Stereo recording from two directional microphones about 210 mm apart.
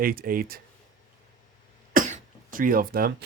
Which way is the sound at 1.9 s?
40° right (ahead or behind).